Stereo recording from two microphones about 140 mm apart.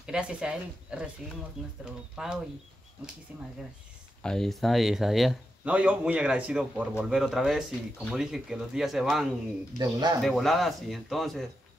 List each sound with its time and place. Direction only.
0.0 s speech: 5° right (ahead or behind)
2.2 s speech: 5° right (ahead or behind)
4.2 s speech: 5° left (ahead or behind)
9.8 s speech: 30° right (ahead or behind)
10.2 s speech: centre (ahead or behind)